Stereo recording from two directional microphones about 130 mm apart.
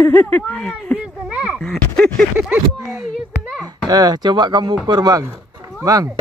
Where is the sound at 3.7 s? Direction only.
30° right (ahead or behind).